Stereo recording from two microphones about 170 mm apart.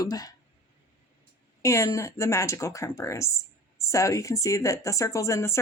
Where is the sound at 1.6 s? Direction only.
15° left (ahead or behind).